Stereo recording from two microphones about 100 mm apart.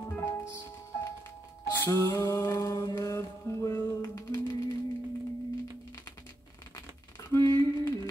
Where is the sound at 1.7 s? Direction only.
25° left (ahead or behind).